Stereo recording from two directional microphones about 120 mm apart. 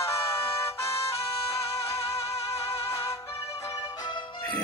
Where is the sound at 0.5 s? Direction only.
25° left (ahead or behind).